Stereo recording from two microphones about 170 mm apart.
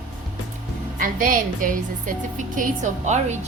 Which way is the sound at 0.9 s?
50° right (ahead or behind).